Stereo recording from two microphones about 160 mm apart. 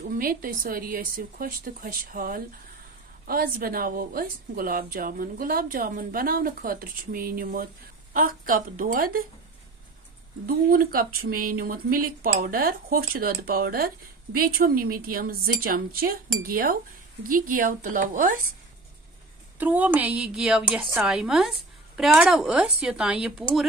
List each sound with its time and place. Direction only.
0.1 s speech: 60° right (ahead or behind)
10.4 s speech: 65° right (ahead or behind)
19.6 s a woman's voice: 10° right (ahead or behind)